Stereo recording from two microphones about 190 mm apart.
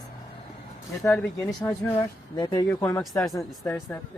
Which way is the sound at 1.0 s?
10° left (ahead or behind).